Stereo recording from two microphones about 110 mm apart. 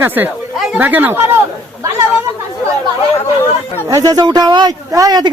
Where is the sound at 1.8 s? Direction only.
25° right (ahead or behind).